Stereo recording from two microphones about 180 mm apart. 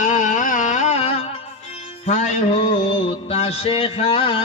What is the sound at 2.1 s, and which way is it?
Music, 40° left (ahead or behind).